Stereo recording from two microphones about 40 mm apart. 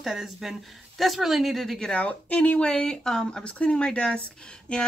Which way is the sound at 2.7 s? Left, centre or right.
Centre.